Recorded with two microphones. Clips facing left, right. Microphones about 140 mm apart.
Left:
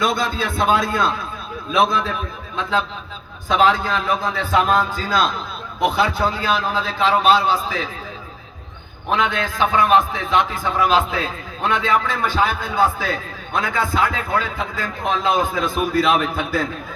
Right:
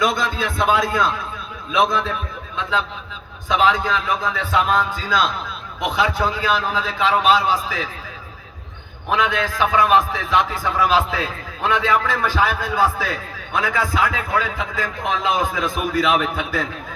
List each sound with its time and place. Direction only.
0.0 s a man's voice: 30° left (ahead or behind)
3.5 s a man's voice: 35° left (ahead or behind)
9.0 s a man's voice: 25° left (ahead or behind)